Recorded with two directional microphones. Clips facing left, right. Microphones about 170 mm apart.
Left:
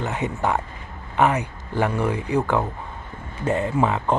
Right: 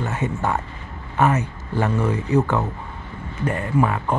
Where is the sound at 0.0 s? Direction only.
15° left (ahead or behind).